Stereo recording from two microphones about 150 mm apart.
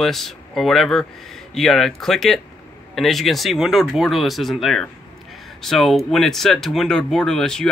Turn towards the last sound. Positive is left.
turn(degrees=5)  # may be behind; listen again after turning